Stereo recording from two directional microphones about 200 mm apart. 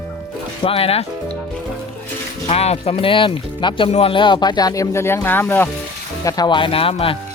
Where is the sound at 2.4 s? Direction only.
30° left (ahead or behind).